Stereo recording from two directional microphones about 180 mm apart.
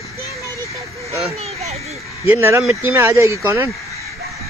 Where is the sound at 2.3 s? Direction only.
15° right (ahead or behind).